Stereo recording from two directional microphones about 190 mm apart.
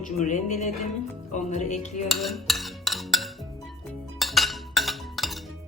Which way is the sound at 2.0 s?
Centre (ahead or behind).